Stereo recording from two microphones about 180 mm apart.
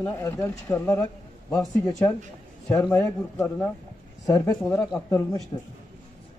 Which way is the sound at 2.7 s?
15° left (ahead or behind).